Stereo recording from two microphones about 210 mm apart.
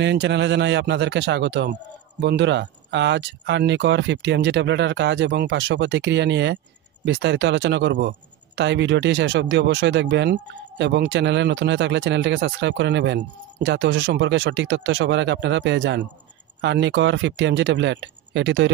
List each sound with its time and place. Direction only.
0.0 s a man's voice: 55° right (ahead or behind)